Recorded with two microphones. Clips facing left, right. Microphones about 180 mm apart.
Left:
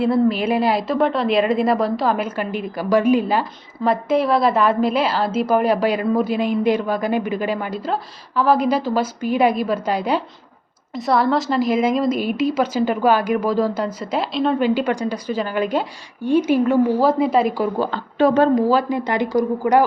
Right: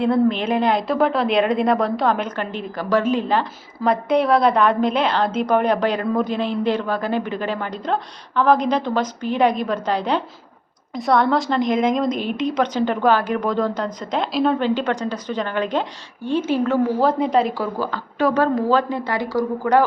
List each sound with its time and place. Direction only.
0.0 s a woman's voice: 5° left (ahead or behind)
17.7 s speech: 25° left (ahead or behind)
18.7 s a woman's voice: 10° left (ahead or behind)